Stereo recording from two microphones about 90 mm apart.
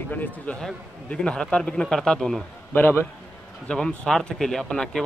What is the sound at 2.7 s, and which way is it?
Speech, 25° left (ahead or behind).